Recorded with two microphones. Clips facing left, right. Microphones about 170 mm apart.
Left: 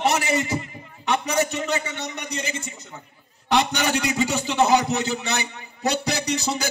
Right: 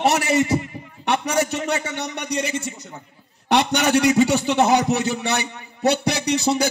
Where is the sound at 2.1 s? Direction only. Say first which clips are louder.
Right 5 dB; 75° right (ahead or behind).